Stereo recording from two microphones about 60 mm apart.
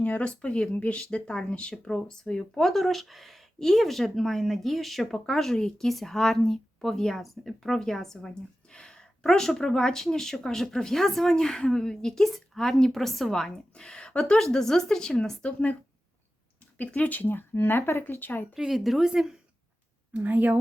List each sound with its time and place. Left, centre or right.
0.0 s speech: left
16.7 s speech: left
18.0 s speech: left
18.5 s speech: centre
20.1 s a woman's voice: right